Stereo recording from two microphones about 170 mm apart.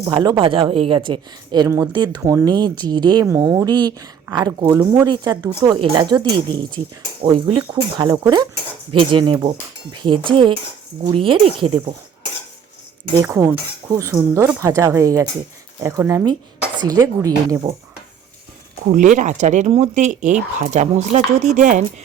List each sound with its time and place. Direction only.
0.0 s speech: 25° right (ahead or behind)
4.7 s speech: 10° right (ahead or behind)
5.0 s speech: 25° right (ahead or behind)
13.2 s speech: 15° right (ahead or behind)
18.9 s speech: 45° right (ahead or behind)